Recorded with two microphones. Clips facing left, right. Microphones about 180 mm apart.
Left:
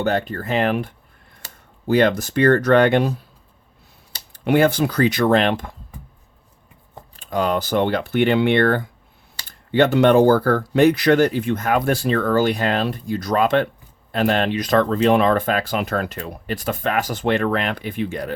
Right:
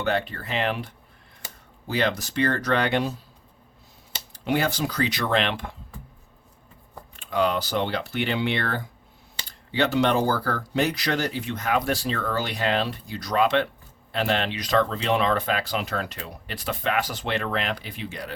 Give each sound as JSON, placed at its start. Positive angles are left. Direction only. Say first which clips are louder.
{"t": 0.0, "sound": "speech", "louder": "left 5 dB", "side_deg": 40}
{"t": 1.9, "sound": "speech", "louder": "left 9 dB", "side_deg": 50}
{"t": 4.3, "sound": "speech", "louder": "left 8 dB", "side_deg": 55}
{"t": 7.2, "sound": "speech", "louder": "left 3 dB", "side_deg": 45}